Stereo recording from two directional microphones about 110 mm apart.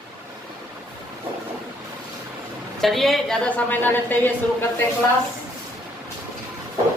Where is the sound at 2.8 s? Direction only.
Centre (ahead or behind); by 4.3 s 15° left (ahead or behind).